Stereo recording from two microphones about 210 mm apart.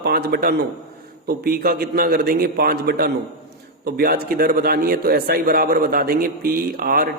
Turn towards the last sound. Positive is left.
turn(degrees=-45)  # may be behind; listen again after turning